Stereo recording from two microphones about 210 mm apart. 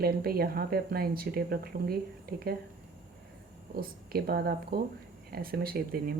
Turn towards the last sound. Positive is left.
turn(degrees=-45)  # may be behind; listen again after turning